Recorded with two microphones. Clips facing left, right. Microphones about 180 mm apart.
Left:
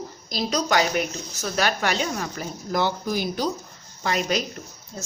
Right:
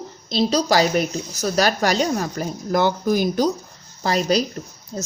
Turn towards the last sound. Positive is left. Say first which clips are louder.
# right 7 dB
turn(degrees=-30)  # may be behind; listen again after turning